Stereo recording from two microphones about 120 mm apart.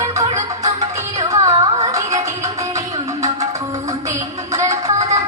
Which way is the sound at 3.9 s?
25° right (ahead or behind).